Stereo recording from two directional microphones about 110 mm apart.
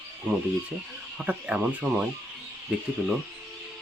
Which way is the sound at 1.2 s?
15° right (ahead or behind).